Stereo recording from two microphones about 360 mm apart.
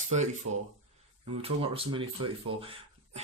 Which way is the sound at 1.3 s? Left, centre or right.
Centre.